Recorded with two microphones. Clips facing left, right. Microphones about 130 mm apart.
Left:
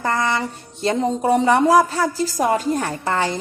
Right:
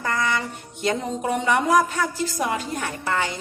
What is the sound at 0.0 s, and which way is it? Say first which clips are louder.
A woman's voice: left 4 dB; 35° left (ahead or behind).